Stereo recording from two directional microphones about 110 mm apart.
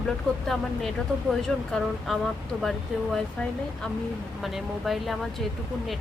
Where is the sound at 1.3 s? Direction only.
5° left (ahead or behind).